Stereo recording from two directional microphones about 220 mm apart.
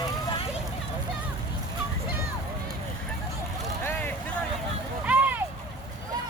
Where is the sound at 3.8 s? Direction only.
10° left (ahead or behind).